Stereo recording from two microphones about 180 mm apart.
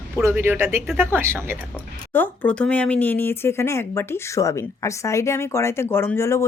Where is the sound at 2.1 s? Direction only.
10° left (ahead or behind).